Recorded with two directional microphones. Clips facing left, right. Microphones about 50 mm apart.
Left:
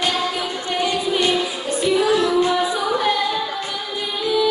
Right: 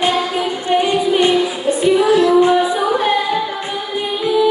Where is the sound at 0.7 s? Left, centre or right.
Right.